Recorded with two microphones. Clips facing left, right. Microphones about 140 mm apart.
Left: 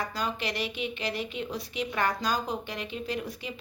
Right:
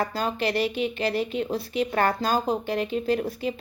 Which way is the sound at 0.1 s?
35° right (ahead or behind).